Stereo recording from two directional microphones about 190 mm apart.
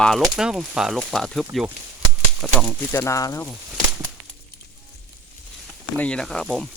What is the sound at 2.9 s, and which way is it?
Speech, 15° left (ahead or behind).